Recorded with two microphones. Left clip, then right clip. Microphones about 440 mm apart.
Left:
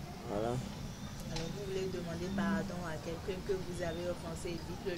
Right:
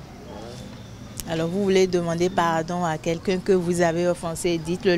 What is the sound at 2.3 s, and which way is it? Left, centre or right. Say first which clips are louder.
Speech: right 13 dB; right.